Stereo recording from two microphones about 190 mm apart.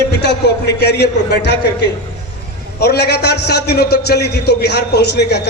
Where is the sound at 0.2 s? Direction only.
60° left (ahead or behind).